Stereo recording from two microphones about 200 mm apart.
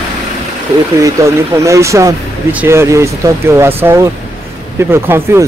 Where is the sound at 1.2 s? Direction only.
15° right (ahead or behind).